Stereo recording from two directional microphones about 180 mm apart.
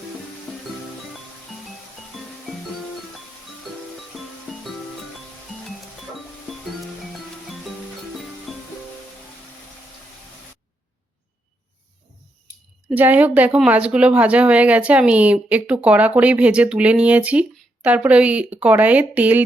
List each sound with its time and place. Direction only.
4.1 s music: centre (ahead or behind)
12.9 s speech: 10° right (ahead or behind)